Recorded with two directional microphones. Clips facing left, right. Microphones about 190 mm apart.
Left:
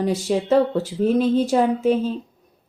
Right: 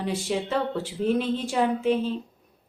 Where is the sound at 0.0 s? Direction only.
40° left (ahead or behind).